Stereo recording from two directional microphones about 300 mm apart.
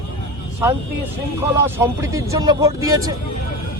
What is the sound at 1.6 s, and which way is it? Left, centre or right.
A man's voice, centre.